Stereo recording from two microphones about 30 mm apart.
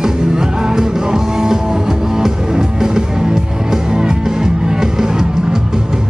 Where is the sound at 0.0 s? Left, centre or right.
Right.